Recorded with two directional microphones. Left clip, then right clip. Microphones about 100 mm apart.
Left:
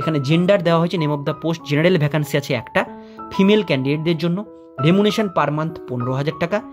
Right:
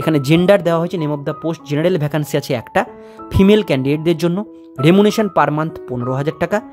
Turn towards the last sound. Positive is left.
turn(degrees=-35)  # may be behind; listen again after turning